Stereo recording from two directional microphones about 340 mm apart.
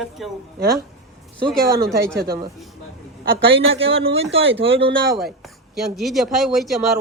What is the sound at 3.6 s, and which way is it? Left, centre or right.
Speech, centre.